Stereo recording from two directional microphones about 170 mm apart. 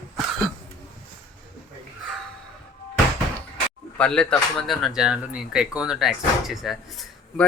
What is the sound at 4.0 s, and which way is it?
Speech, 5° left (ahead or behind).